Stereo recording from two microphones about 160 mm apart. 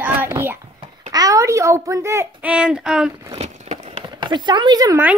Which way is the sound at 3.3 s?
45° right (ahead or behind).